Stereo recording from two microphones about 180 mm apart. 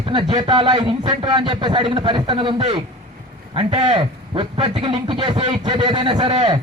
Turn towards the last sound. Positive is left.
turn(degrees=-25)  # may be behind; listen again after turning